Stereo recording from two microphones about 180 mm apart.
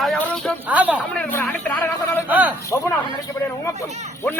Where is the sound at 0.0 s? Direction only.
Centre (ahead or behind).